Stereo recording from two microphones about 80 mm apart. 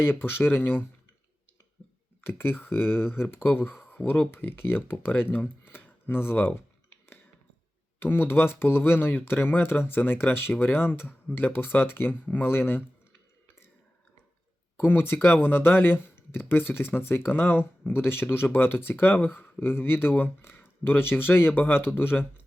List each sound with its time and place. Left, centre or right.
0.0 s speech: left
2.2 s speech: left
8.0 s speech: left
14.8 s speech: left